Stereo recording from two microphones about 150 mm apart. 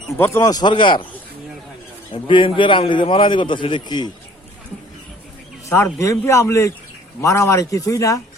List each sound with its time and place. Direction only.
0.2 s a man's voice: 20° left (ahead or behind)
2.1 s a man's voice: 35° left (ahead or behind)
5.6 s a man's voice: 20° left (ahead or behind)